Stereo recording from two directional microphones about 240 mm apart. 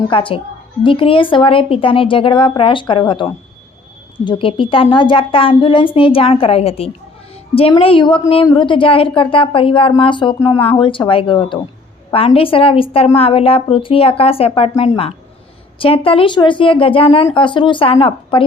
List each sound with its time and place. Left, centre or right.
0.1 s a woman's voice: left